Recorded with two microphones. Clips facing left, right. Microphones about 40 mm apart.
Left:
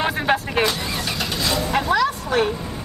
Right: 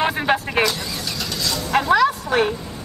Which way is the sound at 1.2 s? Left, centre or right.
Left.